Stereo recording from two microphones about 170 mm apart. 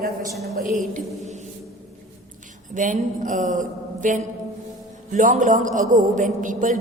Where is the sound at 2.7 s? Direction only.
50° right (ahead or behind).